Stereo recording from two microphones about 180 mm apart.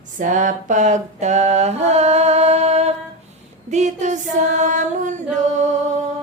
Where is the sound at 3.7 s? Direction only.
40° right (ahead or behind).